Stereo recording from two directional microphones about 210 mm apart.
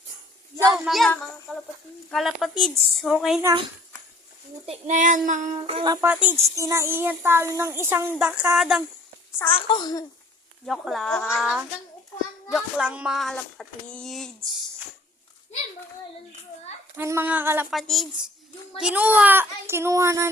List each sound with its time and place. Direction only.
0.7 s speech: centre (ahead or behind)
4.6 s child singing: 30° right (ahead or behind)
5.5 s speech: 25° right (ahead or behind)
6.1 s a child's voice: 10° right (ahead or behind)
9.4 s a child's voice: 25° left (ahead or behind)
10.7 s speech: centre (ahead or behind)
17.0 s a child's voice: 10° right (ahead or behind)